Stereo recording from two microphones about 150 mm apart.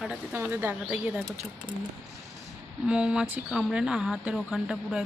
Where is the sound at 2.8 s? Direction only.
5° right (ahead or behind).